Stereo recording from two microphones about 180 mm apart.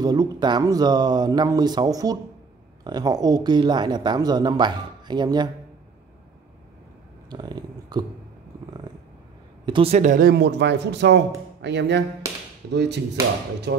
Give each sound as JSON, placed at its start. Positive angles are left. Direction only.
{"t": 0.0, "sound": "speech", "side_deg": -20}
{"t": 7.2, "sound": "a sound", "side_deg": -25}
{"t": 9.7, "sound": "speech", "side_deg": -30}
{"t": 10.3, "sound": "speech", "side_deg": -70}